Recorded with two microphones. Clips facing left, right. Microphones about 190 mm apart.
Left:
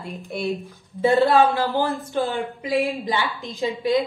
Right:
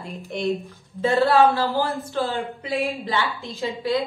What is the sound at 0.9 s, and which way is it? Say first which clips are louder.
A woman's voice: left 1 dB; 15° left (ahead or behind).